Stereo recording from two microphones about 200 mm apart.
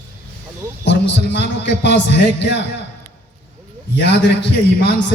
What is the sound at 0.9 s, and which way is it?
A man's voice, 60° left (ahead or behind).